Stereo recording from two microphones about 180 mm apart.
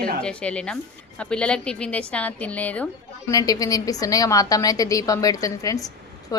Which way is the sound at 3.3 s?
20° left (ahead or behind).